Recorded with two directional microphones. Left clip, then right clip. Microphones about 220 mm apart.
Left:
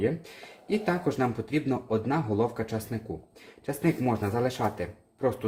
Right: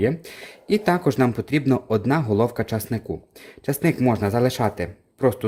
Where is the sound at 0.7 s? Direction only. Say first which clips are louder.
Right 8 dB; 55° right (ahead or behind).